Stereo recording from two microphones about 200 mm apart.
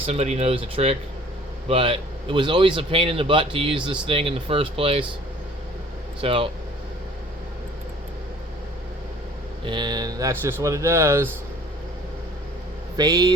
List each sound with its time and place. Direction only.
0.0 s a man's voice: 30° right (ahead or behind)
6.2 s a man's voice: 25° right (ahead or behind)
9.6 s speech: 20° right (ahead or behind)
13.0 s a man's voice: 20° right (ahead or behind)